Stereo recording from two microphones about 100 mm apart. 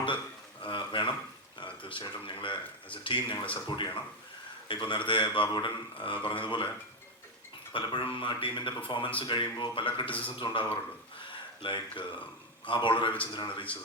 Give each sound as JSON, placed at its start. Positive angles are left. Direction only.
{"t": 0.6, "sound": "a sound", "side_deg": 55}
{"t": 1.5, "sound": "speech", "side_deg": 60}
{"t": 7.7, "sound": "speech", "side_deg": 55}